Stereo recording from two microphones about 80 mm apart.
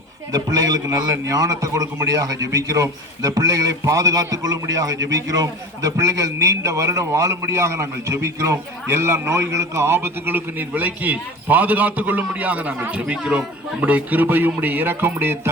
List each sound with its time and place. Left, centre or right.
0.3 s a man's voice: right